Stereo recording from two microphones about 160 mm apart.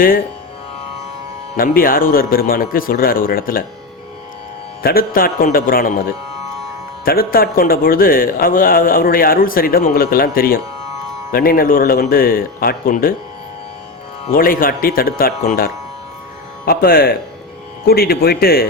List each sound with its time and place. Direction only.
1.5 s a man's voice: 60° left (ahead or behind)
4.8 s a man's voice: 70° left (ahead or behind)
14.3 s a man's voice: 60° left (ahead or behind)